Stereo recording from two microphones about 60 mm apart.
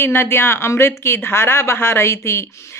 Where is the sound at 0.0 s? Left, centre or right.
Left.